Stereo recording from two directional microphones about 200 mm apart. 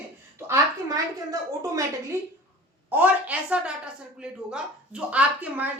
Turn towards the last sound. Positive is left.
turn(degrees=-5)  # may be behind; listen again after turning